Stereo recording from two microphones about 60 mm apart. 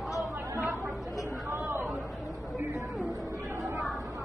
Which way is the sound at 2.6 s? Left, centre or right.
Right.